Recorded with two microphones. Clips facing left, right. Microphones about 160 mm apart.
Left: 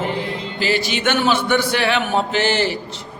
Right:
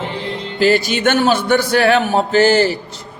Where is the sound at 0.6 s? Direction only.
45° right (ahead or behind).